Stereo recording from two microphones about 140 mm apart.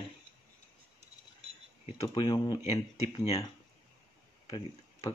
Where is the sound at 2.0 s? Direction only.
35° left (ahead or behind).